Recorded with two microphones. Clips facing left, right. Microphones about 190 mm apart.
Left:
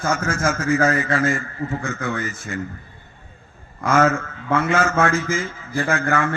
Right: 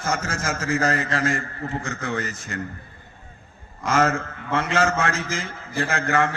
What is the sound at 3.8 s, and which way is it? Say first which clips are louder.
A man's voice: left 3 dB; 60° left (ahead or behind).